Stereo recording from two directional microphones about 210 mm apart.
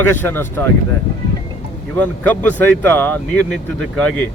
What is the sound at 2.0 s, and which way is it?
Speech, 5° left (ahead or behind).